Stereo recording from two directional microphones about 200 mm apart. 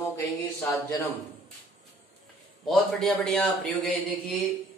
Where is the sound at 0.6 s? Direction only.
15° left (ahead or behind).